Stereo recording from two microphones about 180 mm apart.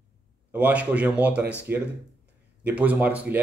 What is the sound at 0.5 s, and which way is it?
Speech, 10° right (ahead or behind).